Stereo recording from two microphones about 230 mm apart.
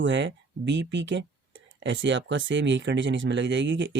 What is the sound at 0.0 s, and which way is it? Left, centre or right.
Speech, right.